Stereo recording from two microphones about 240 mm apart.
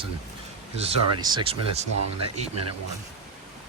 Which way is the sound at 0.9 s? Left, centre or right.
Centre.